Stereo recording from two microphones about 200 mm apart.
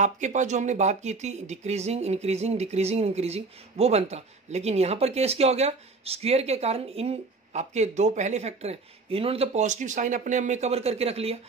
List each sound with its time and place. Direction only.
0.0 s speech: 35° right (ahead or behind)